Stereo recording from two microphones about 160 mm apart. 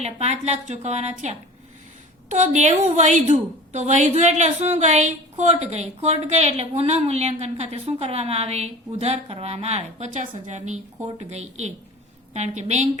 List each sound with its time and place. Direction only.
0.0 s a woman's voice: 45° right (ahead or behind)